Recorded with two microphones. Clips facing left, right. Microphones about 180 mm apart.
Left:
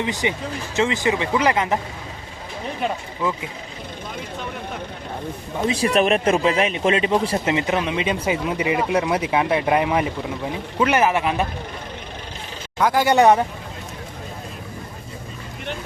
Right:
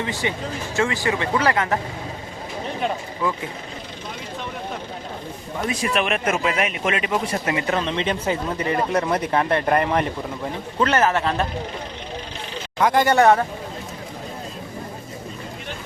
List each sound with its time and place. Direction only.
0.0 s speech: 20° left (ahead or behind)
5.6 s speech: 35° left (ahead or behind); by 11.4 s 10° left (ahead or behind)
12.8 s speech: centre (ahead or behind)
13.1 s speech: 20° left (ahead or behind)